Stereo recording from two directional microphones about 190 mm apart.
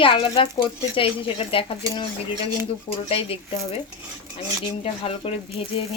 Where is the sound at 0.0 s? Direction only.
30° left (ahead or behind).